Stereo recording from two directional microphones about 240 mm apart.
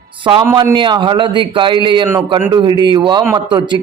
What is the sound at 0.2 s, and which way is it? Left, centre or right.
A man's voice, right.